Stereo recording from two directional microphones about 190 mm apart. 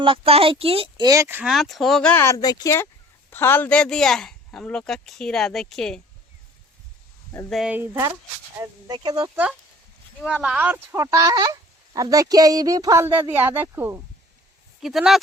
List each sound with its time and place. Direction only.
0.0 s speech: 30° right (ahead or behind); by 6.0 s 5° left (ahead or behind)
7.5 s speech: 5° right (ahead or behind)
10.2 s speech: 5° right (ahead or behind)